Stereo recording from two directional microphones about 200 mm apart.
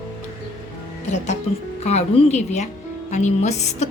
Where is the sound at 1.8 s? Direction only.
35° left (ahead or behind).